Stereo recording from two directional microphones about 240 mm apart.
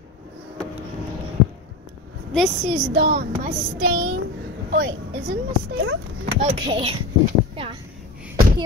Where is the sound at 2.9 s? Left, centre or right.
Right.